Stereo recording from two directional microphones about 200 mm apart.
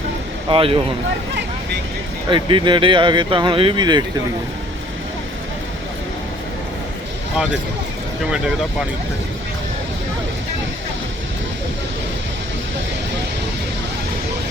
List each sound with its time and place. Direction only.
0.5 s speech: 25° right (ahead or behind)
2.3 s speech: 25° right (ahead or behind)